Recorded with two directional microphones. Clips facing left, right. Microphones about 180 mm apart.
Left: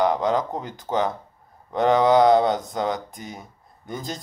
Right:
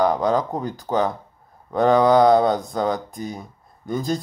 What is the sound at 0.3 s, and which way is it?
Speech, 20° left (ahead or behind).